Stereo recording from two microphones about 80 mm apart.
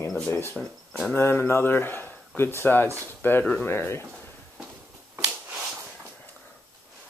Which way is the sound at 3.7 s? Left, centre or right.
Left.